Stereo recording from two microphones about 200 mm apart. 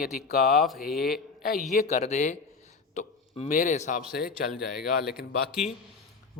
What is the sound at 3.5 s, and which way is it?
Speech, 40° left (ahead or behind).